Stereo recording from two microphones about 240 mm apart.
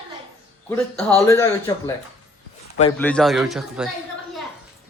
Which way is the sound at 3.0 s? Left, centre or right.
Centre.